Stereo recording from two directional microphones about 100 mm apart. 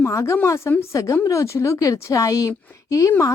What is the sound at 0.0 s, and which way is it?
A woman's voice, 30° left (ahead or behind).